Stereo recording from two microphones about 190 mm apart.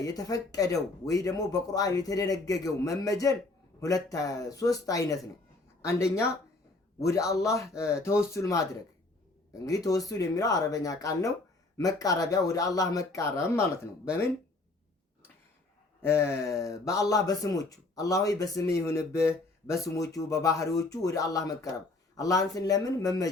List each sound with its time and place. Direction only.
0.0 s speech: 20° left (ahead or behind)
9.6 s speech: 20° left (ahead or behind)
16.0 s speech: 10° left (ahead or behind)